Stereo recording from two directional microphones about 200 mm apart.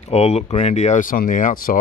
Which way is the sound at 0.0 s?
30° left (ahead or behind).